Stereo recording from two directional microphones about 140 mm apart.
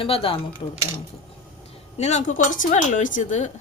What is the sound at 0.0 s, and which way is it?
Speech, 40° left (ahead or behind).